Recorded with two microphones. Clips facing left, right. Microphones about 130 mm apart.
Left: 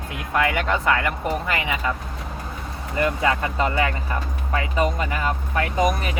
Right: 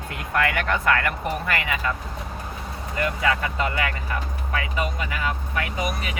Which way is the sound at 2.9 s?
30° left (ahead or behind).